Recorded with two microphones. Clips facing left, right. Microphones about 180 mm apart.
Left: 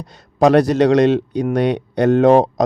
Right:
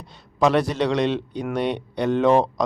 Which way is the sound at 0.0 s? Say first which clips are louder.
Left 6 dB; 40° left (ahead or behind).